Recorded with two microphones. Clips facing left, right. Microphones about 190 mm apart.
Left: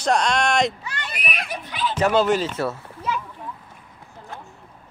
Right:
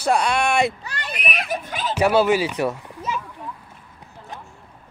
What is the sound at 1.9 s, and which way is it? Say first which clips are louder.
Speech: right 2 dB; 10° right (ahead or behind).